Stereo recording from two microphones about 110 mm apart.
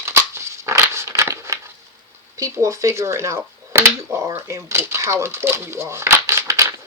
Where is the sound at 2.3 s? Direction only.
30° right (ahead or behind).